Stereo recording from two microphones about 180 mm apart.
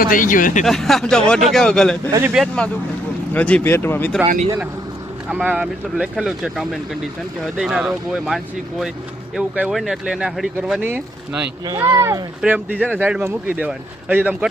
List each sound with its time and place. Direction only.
0.0 s speech: 50° left (ahead or behind)
0.6 s speech: centre (ahead or behind)
5.3 s speech: 5° right (ahead or behind)
11.6 s speech: 20° right (ahead or behind)
12.4 s speech: 5° right (ahead or behind)